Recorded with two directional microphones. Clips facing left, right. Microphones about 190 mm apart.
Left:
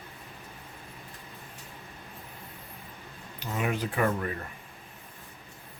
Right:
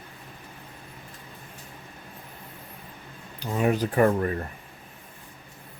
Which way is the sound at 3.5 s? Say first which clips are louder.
Right 7 dB; 35° right (ahead or behind).